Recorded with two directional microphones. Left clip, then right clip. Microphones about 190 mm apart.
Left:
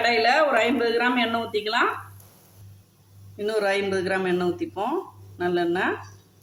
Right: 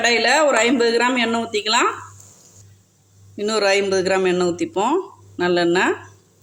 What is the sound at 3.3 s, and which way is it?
Speech, 40° right (ahead or behind).